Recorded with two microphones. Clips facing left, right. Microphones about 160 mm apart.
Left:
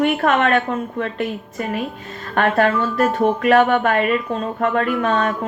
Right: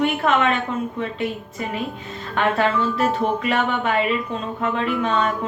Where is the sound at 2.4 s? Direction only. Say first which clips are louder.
Left 3 dB; 50° left (ahead or behind).